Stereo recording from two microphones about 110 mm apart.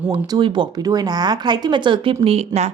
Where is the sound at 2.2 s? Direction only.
70° right (ahead or behind).